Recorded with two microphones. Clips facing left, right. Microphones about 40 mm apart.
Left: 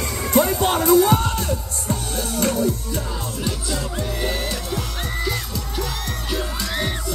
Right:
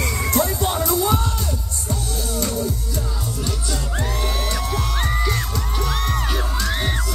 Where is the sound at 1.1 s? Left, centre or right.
Left.